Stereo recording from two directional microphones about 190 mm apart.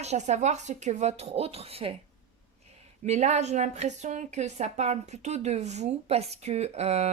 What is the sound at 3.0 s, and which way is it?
Speech, 35° right (ahead or behind).